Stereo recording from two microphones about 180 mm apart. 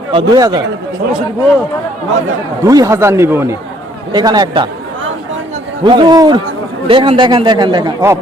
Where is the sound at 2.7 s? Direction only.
20° right (ahead or behind).